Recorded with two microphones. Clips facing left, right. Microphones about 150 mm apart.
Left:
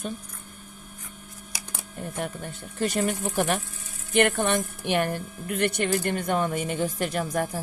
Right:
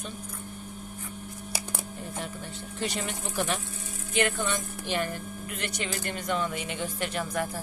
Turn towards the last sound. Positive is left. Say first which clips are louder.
# left 4 dB
turn(degrees=45)  # may be behind; listen again after turning